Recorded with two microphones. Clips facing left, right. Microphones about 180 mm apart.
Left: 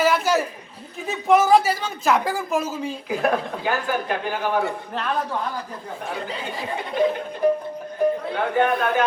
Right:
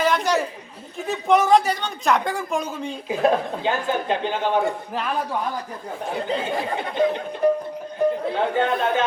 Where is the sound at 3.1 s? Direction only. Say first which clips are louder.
Right 3 dB; 25° right (ahead or behind).